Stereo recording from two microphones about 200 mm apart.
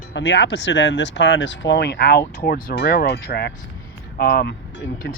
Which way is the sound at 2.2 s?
40° left (ahead or behind).